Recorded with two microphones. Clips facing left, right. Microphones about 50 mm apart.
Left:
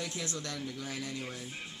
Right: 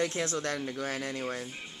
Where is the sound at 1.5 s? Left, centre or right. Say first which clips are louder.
Right 1 dB; centre.